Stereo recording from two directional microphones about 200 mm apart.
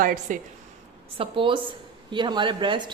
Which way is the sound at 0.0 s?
45° right (ahead or behind).